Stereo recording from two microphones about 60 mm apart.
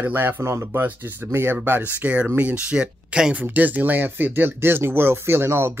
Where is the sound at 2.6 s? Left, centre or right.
Centre; by 5.7 s right.